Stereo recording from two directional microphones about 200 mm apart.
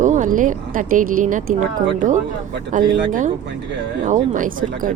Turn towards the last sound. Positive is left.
turn(degrees=-40)  # may be behind; listen again after turning